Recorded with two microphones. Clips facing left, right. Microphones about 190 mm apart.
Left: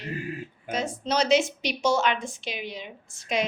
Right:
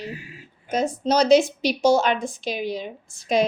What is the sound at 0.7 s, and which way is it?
A woman's voice, 40° right (ahead or behind).